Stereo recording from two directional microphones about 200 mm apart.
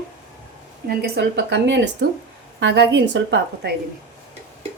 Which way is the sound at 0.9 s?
55° right (ahead or behind).